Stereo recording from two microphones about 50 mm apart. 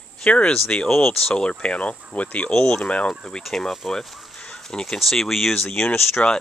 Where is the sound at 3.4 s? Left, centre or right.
Centre.